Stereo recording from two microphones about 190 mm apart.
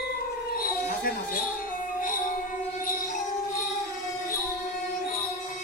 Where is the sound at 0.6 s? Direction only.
50° left (ahead or behind).